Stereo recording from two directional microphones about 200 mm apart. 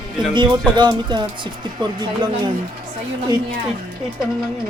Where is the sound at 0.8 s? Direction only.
20° right (ahead or behind).